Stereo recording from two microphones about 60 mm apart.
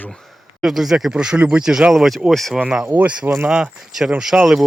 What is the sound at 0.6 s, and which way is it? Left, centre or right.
Speech, centre.